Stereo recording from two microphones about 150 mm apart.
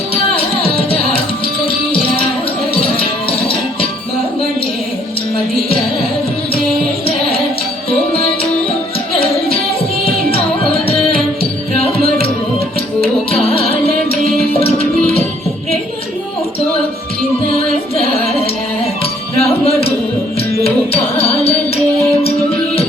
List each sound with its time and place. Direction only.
0.1 s music: 40° left (ahead or behind)
7.9 s music: 40° left (ahead or behind)
13.0 s music: 40° left (ahead or behind)
17.9 s music: 40° left (ahead or behind)